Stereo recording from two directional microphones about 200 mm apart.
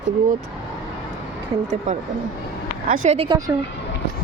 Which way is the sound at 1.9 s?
35° right (ahead or behind).